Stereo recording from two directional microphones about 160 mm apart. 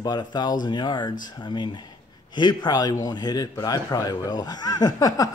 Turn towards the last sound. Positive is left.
turn(degrees=25)  # may be behind; listen again after turning